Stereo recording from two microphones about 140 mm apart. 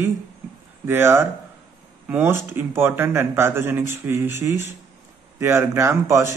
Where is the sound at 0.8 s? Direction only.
15° right (ahead or behind).